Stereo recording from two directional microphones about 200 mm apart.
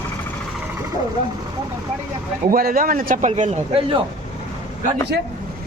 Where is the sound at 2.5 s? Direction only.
45° right (ahead or behind); by 3.9 s 30° right (ahead or behind).